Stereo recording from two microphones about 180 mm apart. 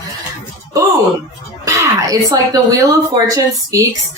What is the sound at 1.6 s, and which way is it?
A woman's voice, 20° right (ahead or behind).